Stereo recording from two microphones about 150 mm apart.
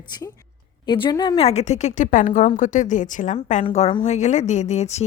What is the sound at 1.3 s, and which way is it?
A woman's voice, 45° left (ahead or behind).